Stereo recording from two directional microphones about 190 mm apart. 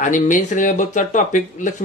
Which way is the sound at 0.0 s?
40° left (ahead or behind).